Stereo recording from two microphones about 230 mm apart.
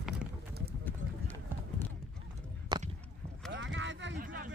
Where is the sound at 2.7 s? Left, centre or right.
Centre.